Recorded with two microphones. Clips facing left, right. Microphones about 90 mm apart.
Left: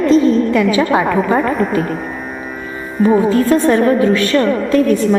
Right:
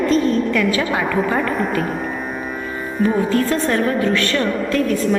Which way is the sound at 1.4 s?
Centre (ahead or behind).